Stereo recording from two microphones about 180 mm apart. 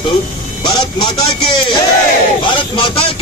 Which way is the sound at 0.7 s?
25° left (ahead or behind).